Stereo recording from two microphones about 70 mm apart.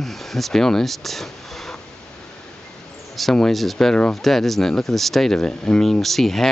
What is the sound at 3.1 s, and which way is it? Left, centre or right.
Speech, centre.